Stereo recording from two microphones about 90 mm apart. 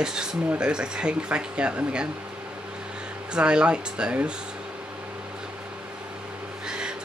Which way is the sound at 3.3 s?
10° right (ahead or behind).